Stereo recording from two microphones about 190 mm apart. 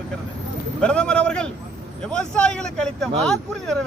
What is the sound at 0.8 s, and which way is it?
Speech, 5° left (ahead or behind).